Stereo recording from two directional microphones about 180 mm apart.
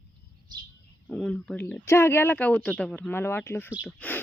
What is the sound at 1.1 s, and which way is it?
Speech, 5° left (ahead or behind).